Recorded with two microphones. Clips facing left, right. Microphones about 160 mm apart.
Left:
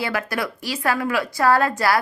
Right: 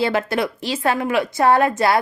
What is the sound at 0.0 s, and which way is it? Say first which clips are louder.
A woman's voice: right 5 dB; 25° right (ahead or behind).